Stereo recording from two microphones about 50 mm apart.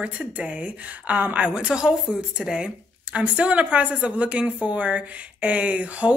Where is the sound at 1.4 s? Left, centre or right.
Centre.